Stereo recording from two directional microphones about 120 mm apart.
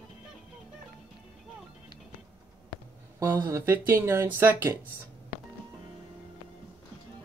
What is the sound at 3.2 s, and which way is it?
Speech, 20° right (ahead or behind).